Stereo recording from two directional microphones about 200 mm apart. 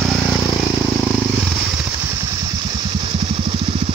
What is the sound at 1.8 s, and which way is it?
Vehicle, 15° right (ahead or behind).